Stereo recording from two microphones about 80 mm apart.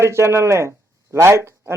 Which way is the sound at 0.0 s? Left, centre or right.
Right.